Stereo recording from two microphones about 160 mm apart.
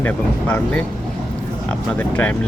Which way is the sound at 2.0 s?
10° left (ahead or behind).